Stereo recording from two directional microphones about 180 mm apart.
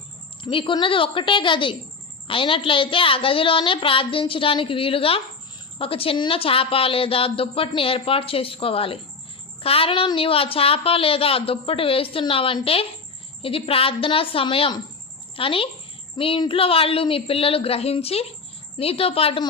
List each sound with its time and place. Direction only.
0.4 s a woman's voice: 25° left (ahead or behind)